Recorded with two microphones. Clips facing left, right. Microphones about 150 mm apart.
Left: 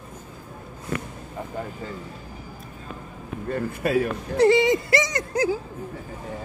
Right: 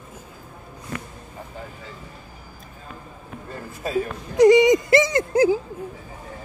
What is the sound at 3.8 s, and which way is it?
Speech, 70° left (ahead or behind).